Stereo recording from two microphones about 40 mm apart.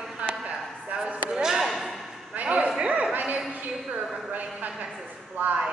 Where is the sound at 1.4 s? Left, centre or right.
Centre.